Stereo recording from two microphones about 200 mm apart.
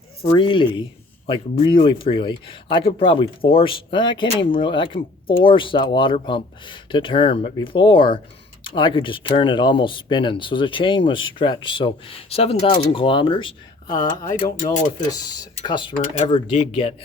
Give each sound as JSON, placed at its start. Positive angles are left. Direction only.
{"t": 0.3, "sound": "speech", "side_deg": 25}
{"t": 14.5, "sound": "speech", "side_deg": 40}
{"t": 15.1, "sound": "speech", "side_deg": 20}